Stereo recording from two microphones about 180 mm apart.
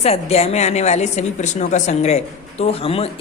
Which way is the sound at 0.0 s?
35° left (ahead or behind).